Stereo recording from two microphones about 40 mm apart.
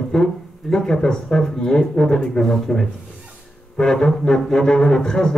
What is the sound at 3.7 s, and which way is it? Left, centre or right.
Speech, centre.